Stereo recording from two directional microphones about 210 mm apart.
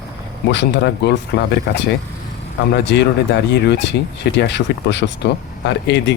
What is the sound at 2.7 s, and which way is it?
Speech, 55° left (ahead or behind).